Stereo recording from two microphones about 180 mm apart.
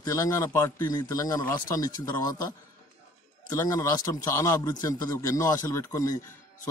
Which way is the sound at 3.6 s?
15° left (ahead or behind).